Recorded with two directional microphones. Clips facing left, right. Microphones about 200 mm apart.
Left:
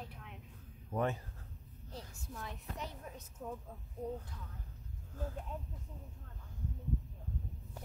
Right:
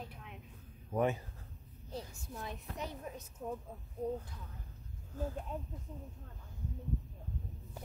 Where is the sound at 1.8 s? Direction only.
15° right (ahead or behind).